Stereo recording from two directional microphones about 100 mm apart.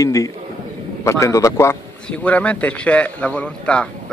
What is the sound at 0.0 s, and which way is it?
A man's voice, 35° left (ahead or behind).